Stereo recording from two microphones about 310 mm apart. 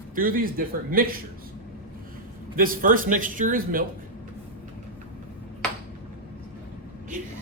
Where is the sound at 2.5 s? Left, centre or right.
Right.